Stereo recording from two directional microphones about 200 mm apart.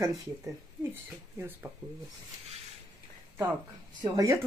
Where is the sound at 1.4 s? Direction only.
10° right (ahead or behind).